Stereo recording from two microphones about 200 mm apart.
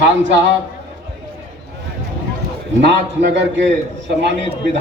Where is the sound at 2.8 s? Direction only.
60° right (ahead or behind).